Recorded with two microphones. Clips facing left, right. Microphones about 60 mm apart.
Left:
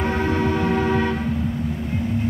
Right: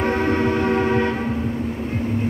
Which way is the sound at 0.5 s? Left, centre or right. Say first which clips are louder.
Right 1 dB; right.